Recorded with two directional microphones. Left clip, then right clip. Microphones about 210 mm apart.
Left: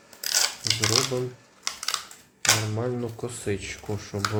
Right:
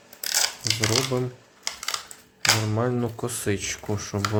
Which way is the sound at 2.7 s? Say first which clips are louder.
Right 4 dB; 25° right (ahead or behind).